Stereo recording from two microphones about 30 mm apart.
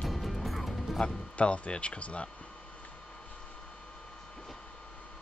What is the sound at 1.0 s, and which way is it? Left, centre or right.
Speech, left.